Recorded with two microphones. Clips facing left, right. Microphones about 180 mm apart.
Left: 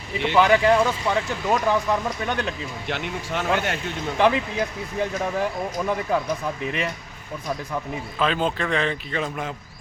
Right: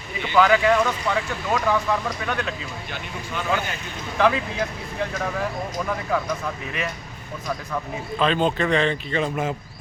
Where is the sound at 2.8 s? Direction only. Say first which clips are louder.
Left 5 dB; 75° left (ahead or behind).